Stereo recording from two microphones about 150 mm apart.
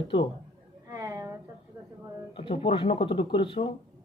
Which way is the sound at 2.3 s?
40° left (ahead or behind).